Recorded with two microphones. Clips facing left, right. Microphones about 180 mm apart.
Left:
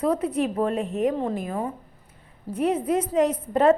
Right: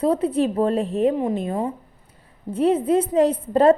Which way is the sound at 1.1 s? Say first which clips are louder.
Right 4 dB; 15° right (ahead or behind).